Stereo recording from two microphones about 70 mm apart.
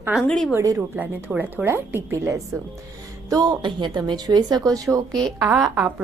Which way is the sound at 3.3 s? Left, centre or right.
Right.